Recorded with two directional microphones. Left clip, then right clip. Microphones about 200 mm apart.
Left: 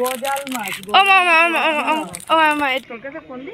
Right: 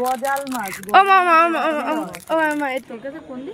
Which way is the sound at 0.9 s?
45° right (ahead or behind).